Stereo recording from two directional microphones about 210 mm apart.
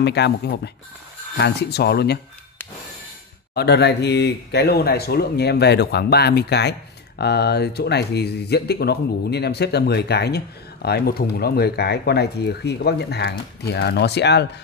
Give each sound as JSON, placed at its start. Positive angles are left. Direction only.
{"t": 0.0, "sound": "speech", "side_deg": 55}
{"t": 1.4, "sound": "speech", "side_deg": 50}
{"t": 3.5, "sound": "speech", "side_deg": 55}